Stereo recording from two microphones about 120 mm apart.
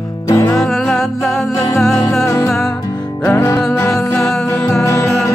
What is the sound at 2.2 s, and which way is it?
Music, 20° left (ahead or behind).